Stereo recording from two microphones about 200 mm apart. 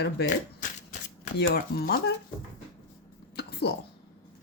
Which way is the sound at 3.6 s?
55° left (ahead or behind).